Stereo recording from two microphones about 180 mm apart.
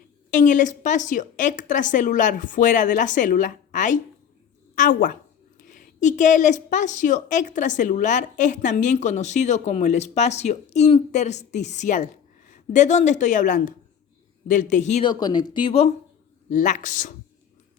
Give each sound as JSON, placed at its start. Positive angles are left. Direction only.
{"t": 0.3, "sound": "a woman's voice", "side_deg": 45}
{"t": 15.0, "sound": "a woman's voice", "side_deg": 25}